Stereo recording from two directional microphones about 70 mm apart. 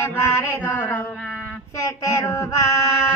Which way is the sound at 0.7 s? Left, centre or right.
Left.